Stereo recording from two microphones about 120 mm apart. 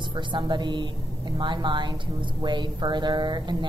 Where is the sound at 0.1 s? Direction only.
40° right (ahead or behind).